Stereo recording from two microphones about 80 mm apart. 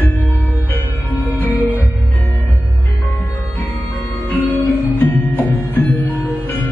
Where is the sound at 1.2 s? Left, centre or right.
Left.